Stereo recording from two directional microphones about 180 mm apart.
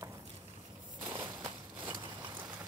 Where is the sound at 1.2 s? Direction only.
25° right (ahead or behind).